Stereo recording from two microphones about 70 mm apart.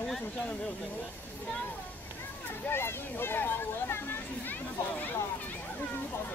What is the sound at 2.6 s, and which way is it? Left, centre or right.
Speech, left.